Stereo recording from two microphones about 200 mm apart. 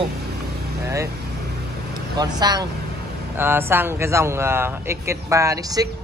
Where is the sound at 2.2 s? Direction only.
20° right (ahead or behind).